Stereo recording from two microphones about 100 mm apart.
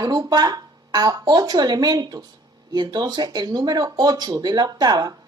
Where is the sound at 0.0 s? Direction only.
40° right (ahead or behind).